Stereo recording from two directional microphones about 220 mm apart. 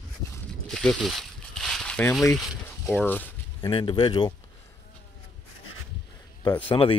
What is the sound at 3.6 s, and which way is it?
Speech, 25° left (ahead or behind).